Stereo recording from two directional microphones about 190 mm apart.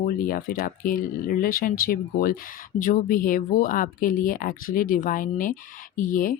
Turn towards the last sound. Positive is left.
turn(degrees=45)  # may be behind; listen again after turning